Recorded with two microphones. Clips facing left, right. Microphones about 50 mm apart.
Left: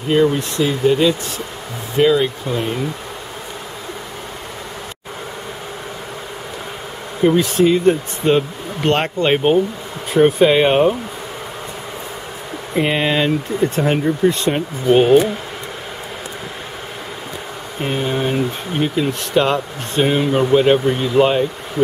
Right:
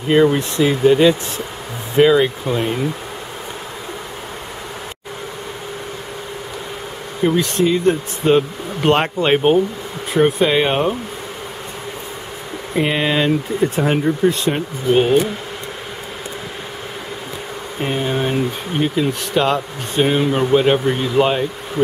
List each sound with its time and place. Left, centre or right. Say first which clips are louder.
0.1 s speech: right 2 dB; centre
7.2 s speech: left 3 dB; centre
8.4 s speech: right 1 dB; centre
12.7 s speech: even; centre
17.7 s speech: even; centre